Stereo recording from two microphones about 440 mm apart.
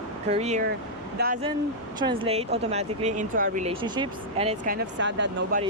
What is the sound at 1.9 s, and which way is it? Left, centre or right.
Speech, centre.